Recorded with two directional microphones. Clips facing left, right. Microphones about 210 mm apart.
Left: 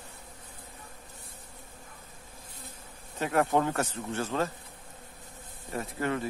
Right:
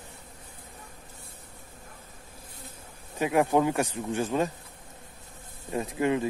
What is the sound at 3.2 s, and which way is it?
Speech, 15° right (ahead or behind).